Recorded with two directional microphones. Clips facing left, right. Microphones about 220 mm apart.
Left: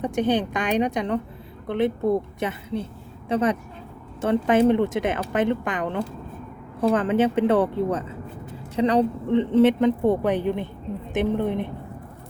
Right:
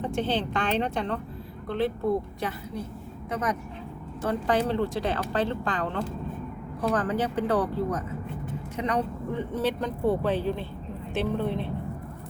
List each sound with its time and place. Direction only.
0.0 s a woman's voice: 15° left (ahead or behind)